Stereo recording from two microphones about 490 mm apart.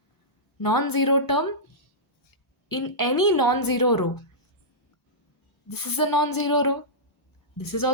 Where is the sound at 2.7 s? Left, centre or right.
Left.